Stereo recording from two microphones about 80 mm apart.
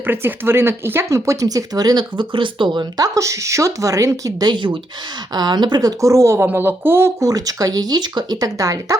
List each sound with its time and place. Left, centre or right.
0.0 s speech: right
2.1 s speech: right
3.0 s speech: right
4.5 s speech: right
5.3 s speech: right
6.0 s speech: right
6.5 s speech: right
7.2 s speech: right